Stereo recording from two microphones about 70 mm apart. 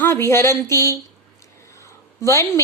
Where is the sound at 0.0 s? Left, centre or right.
Left.